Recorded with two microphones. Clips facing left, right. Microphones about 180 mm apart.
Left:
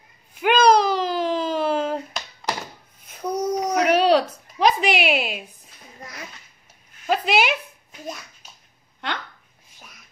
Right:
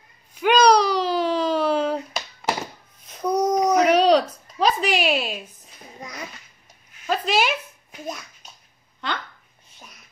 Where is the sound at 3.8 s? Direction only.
10° left (ahead or behind).